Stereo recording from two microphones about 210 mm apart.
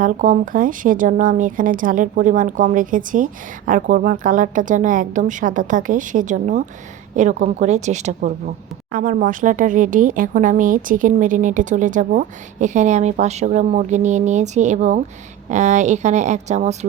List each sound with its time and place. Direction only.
0.0 s a woman's voice: 40° right (ahead or behind)